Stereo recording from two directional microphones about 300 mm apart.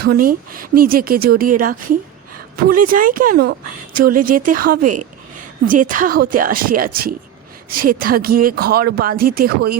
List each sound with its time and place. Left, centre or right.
0.0 s speech: right